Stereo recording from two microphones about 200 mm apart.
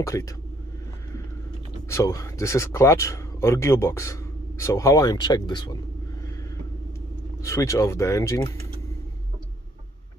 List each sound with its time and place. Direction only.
0.0 s speech: 15° left (ahead or behind)
1.9 s speech: 15° left (ahead or behind)
7.4 s speech: 15° left (ahead or behind)